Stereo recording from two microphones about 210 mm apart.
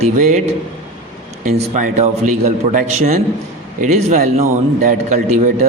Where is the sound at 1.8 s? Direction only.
35° right (ahead or behind).